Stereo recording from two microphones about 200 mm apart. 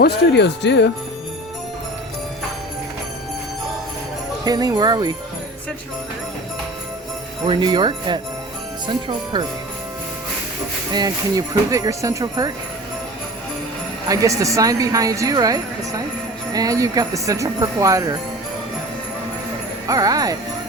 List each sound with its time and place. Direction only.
0.0 s speech: 55° left (ahead or behind)
4.4 s speech: 20° right (ahead or behind)
7.4 s speech: 25° right (ahead or behind)
10.9 s speech: 20° right (ahead or behind)
14.1 s speech: 15° right (ahead or behind)
19.9 s speech: 20° right (ahead or behind)